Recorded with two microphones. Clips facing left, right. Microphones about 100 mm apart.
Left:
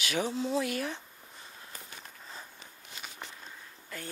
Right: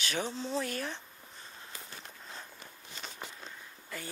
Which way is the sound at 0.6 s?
35° right (ahead or behind).